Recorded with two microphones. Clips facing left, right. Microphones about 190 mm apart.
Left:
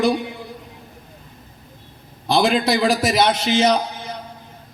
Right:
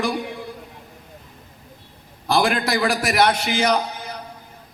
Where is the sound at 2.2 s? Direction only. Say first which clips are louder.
Left 3 dB; 25° left (ahead or behind).